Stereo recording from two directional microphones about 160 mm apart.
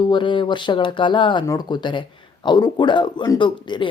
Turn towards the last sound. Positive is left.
turn(degrees=30)  # may be behind; listen again after turning